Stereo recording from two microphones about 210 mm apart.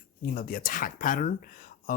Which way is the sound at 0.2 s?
40° left (ahead or behind).